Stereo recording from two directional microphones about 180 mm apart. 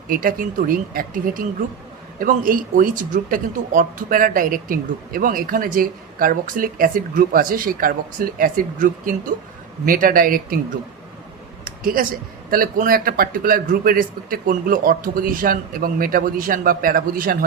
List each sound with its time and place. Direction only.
0.1 s speech: 50° right (ahead or behind)
11.6 s a sound: 50° right (ahead or behind)
12.5 s speech: 50° right (ahead or behind)